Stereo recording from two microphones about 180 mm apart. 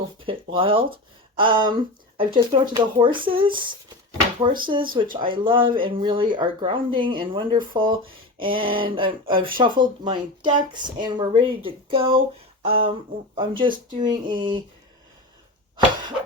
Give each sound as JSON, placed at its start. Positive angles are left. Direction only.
{"t": 0.3, "sound": "speech", "side_deg": -30}
{"t": 9.0, "sound": "speech", "side_deg": -50}
{"t": 9.4, "sound": "speech", "side_deg": -25}